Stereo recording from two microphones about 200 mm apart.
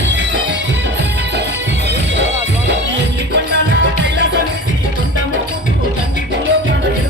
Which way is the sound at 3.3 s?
65° right (ahead or behind).